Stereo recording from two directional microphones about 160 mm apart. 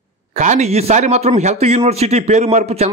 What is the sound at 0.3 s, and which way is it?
A man's voice, 45° right (ahead or behind).